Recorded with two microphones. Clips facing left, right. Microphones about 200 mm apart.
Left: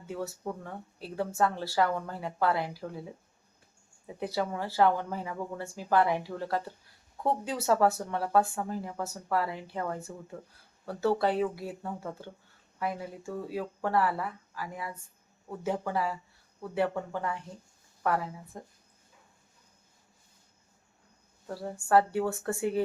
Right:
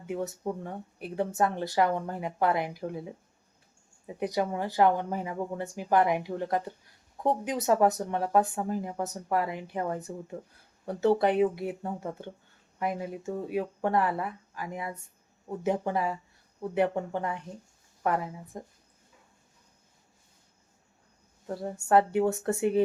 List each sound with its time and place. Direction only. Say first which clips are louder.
0.1 s speech: right 3 dB; 20° right (ahead or behind)
4.0 s speech: right 3 dB; 15° right (ahead or behind)
21.4 s speech: right 3 dB; 20° right (ahead or behind)